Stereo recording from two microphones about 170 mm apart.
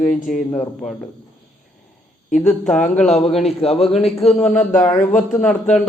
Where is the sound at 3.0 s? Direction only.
40° left (ahead or behind).